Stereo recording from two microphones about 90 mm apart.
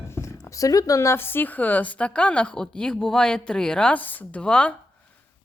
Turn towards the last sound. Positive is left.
turn(degrees=10)  # may be behind; listen again after turning